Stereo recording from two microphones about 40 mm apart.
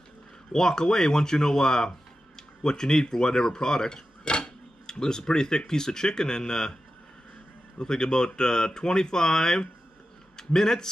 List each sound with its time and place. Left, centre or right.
0.5 s speech: centre
2.6 s cutlery: centre
5.7 s speech: centre
7.8 s speech: centre